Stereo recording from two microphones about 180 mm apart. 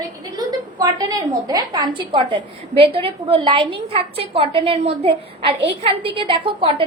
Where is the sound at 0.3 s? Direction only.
20° right (ahead or behind).